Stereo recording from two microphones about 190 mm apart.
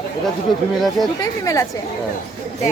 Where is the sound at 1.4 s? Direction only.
15° left (ahead or behind).